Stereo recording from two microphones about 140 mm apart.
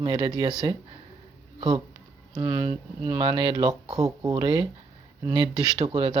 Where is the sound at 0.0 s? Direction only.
35° right (ahead or behind).